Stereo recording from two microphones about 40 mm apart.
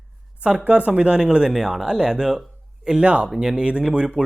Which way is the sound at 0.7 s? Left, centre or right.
Right.